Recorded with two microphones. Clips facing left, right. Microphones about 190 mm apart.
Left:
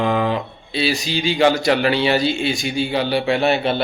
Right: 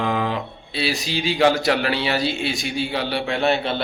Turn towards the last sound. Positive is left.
turn(degrees=5)  # may be behind; listen again after turning